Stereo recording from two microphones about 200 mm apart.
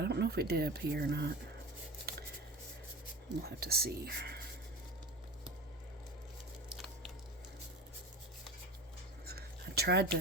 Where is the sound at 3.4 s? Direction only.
50° right (ahead or behind).